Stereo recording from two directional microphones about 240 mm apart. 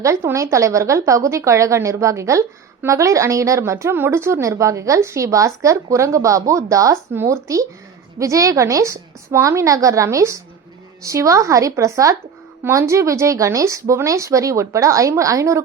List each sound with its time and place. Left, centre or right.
0.0 s a woman's voice: centre